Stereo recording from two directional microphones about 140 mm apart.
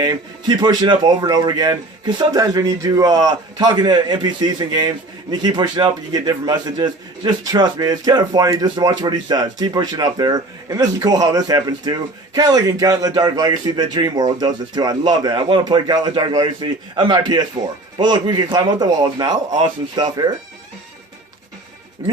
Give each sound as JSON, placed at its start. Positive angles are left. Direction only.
{"t": 0.0, "sound": "a man's voice", "side_deg": -30}
{"t": 22.0, "sound": "speech", "side_deg": -25}